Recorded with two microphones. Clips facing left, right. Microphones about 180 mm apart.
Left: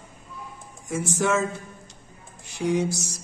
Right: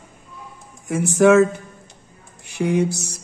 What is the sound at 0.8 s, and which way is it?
Speech, 65° right (ahead or behind).